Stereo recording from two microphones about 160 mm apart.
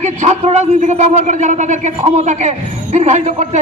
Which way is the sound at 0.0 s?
45° right (ahead or behind).